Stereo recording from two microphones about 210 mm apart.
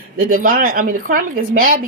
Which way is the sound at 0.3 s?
40° right (ahead or behind).